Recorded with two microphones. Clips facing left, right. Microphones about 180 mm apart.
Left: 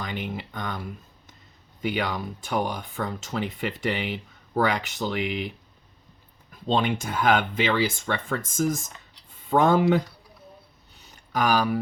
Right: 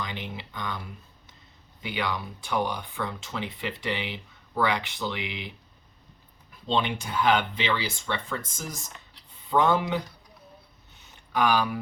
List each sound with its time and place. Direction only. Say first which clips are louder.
0.0 s speech: left 4 dB; 50° left (ahead or behind)
1.8 s speech: left 4 dB; 45° left (ahead or behind)
6.7 s speech: left 3 dB; 45° left (ahead or behind)
11.0 s a sound: even; 40° left (ahead or behind)